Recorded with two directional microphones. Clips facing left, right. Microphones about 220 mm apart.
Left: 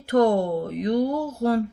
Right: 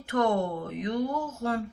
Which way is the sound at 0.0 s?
35° left (ahead or behind).